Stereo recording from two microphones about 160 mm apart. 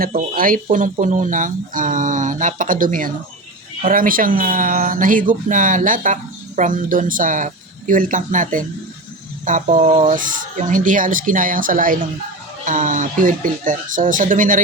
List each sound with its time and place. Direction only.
0.0 s speech: 65° right (ahead or behind)